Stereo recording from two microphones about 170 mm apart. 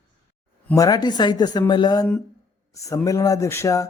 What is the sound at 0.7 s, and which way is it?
A man's voice, 20° left (ahead or behind).